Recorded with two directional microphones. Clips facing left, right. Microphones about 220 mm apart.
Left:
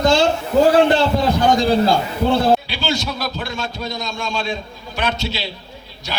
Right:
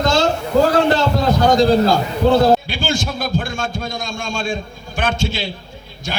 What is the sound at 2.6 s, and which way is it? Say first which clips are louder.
A man's voice: right 1 dB; 50° right (ahead or behind).